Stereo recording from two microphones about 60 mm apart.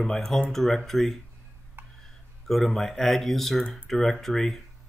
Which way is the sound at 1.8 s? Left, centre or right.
Right.